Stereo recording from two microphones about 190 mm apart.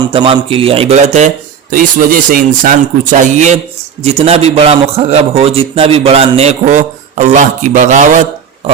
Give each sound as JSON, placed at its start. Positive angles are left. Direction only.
{"t": 0.1, "sound": "a man's voice", "side_deg": -30}